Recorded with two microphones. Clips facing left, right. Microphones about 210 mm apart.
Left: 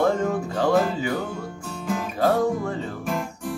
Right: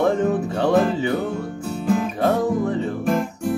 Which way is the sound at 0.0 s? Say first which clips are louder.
Right 3 dB; 20° right (ahead or behind).